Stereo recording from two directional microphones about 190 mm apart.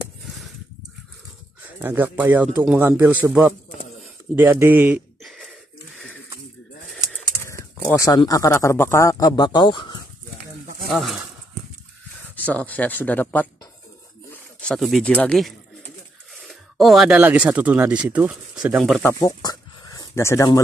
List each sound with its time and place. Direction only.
1.8 s a man's voice: 10° right (ahead or behind)
4.4 s a sound: 10° right (ahead or behind)
7.1 s speech: 15° left (ahead or behind)
10.9 s speech: centre (ahead or behind)
12.4 s speech: 10° left (ahead or behind)
19.0 s dog: 15° left (ahead or behind)